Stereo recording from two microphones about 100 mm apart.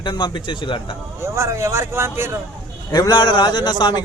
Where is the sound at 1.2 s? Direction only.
30° right (ahead or behind).